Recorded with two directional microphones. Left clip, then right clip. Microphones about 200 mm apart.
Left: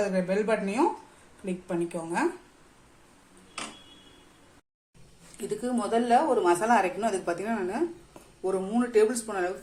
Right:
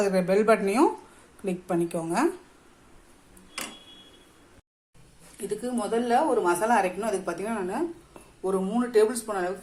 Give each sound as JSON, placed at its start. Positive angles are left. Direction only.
{"t": 0.0, "sound": "speech", "side_deg": -35}
{"t": 5.4, "sound": "a woman's voice", "side_deg": 0}